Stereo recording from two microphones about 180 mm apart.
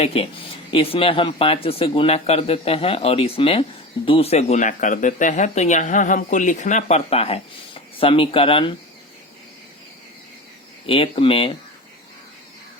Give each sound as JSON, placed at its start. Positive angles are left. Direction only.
{"t": 0.0, "sound": "speech", "side_deg": 30}
{"t": 10.8, "sound": "speech", "side_deg": 30}